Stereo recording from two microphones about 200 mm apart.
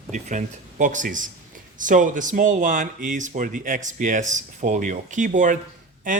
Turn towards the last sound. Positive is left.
turn(degrees=-40)  # may be behind; listen again after turning